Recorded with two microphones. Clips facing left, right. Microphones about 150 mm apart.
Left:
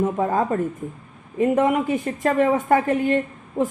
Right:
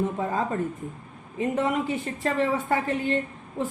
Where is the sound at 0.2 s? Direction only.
45° left (ahead or behind).